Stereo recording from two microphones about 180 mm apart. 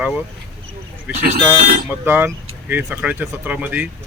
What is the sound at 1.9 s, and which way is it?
Speech, 10° right (ahead or behind).